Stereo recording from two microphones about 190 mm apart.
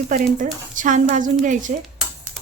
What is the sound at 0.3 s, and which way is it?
Speech, 45° right (ahead or behind).